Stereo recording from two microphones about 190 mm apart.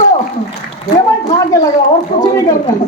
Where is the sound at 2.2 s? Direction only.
20° left (ahead or behind).